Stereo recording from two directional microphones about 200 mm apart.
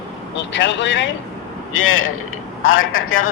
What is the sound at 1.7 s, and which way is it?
A man's voice, 90° left.